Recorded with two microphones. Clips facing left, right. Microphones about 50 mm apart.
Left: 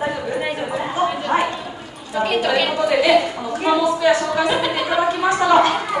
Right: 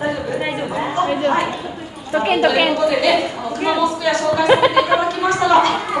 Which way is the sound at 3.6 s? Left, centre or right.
Centre.